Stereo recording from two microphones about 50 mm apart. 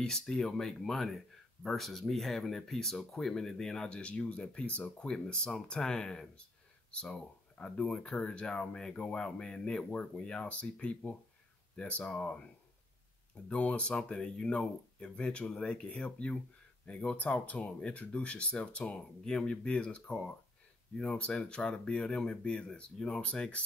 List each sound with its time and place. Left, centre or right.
0.0 s speech: centre
4.0 s speech: left
5.1 s speech: centre
13.5 s speech: left